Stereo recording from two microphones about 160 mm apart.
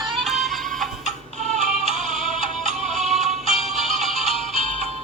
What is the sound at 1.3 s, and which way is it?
Music, 45° right (ahead or behind).